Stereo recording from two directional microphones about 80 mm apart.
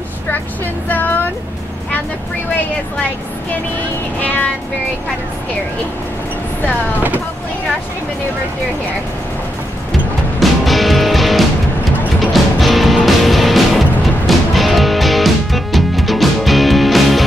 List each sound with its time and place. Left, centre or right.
0.8 s speech: left
4.2 s music: centre
10.4 s music: centre